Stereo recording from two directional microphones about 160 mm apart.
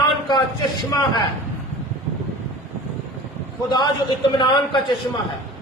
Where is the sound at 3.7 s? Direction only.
25° left (ahead or behind).